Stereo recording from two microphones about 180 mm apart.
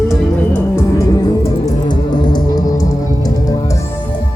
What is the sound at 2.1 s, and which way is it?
Music, 25° left (ahead or behind).